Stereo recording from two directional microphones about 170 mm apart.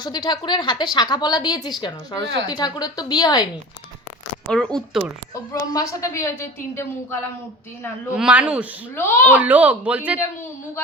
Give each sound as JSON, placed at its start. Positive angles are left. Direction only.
{"t": 0.0, "sound": "speech", "side_deg": 25}
{"t": 4.4, "sound": "speech", "side_deg": 5}
{"t": 5.3, "sound": "a woman's voice", "side_deg": 20}
{"t": 8.1, "sound": "speech", "side_deg": -5}
{"t": 9.0, "sound": "a woman's voice", "side_deg": 10}
{"t": 9.3, "sound": "speech", "side_deg": -10}